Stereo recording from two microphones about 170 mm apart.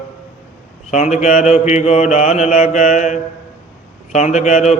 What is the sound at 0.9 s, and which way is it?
Mantra, 45° left (ahead or behind).